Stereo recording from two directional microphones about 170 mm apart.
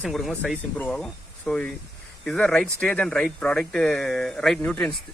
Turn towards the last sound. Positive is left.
turn(degrees=5)  # may be behind; listen again after turning